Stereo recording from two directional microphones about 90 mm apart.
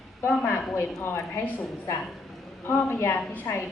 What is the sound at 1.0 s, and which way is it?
Speech, 30° left (ahead or behind).